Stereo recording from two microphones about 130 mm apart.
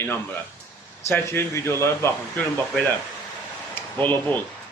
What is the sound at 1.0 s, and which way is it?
Speech, 20° left (ahead or behind).